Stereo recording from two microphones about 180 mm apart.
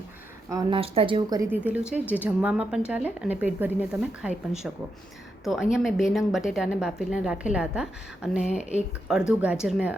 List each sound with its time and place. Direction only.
0.5 s speech: 30° right (ahead or behind)
1.4 s a woman's voice: 10° right (ahead or behind)